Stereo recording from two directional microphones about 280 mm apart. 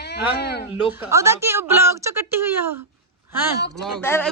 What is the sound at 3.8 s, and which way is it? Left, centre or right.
Speech, centre.